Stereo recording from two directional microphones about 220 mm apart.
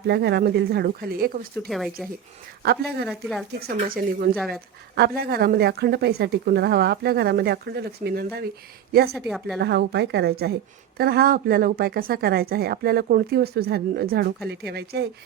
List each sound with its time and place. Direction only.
0.1 s a woman's voice: 50° right (ahead or behind)
1.6 s a woman's voice: centre (ahead or behind)
2.6 s a woman's voice: 50° right (ahead or behind)
3.1 s a woman's voice: centre (ahead or behind)
3.6 s speech: 40° right (ahead or behind)
4.4 s a woman's voice: centre (ahead or behind)
4.9 s a woman's voice: 45° right (ahead or behind)
9.1 s a woman's voice: centre (ahead or behind)
9.6 s a woman's voice: 50° right (ahead or behind)